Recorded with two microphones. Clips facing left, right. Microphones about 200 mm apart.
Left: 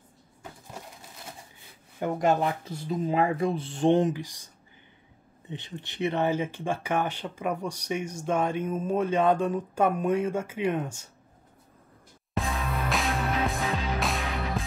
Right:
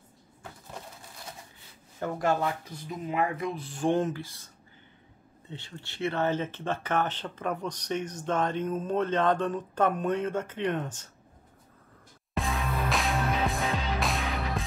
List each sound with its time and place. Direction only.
2.0 s speech: 20° left (ahead or behind)
5.5 s speech: 20° left (ahead or behind)
12.4 s music: centre (ahead or behind)